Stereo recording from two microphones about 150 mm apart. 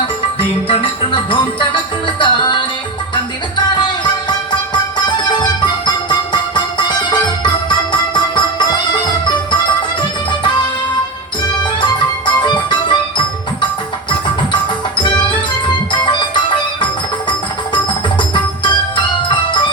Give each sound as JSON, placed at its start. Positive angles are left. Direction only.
{"t": 0.3, "sound": "music", "side_deg": 35}
{"t": 3.8, "sound": "music", "side_deg": 30}
{"t": 11.8, "sound": "music", "side_deg": 30}
{"t": 18.2, "sound": "music", "side_deg": 30}